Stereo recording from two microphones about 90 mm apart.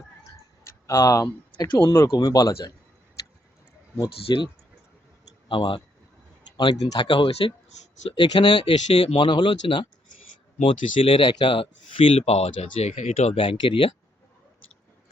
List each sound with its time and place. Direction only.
0.3 s tick-tock: 35° left (ahead or behind)
1.5 s speech: 60° left (ahead or behind)
2.0 s speech: 45° left (ahead or behind)
4.3 s speech: 55° left (ahead or behind)
5.5 s speech: 65° left (ahead or behind)
6.6 s speech: 55° left (ahead or behind)
10.6 s speech: 90° left